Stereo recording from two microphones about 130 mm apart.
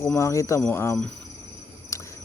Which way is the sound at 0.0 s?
20° left (ahead or behind).